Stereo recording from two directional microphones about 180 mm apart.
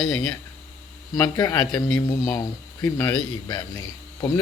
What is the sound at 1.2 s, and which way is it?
Speech, 15° left (ahead or behind).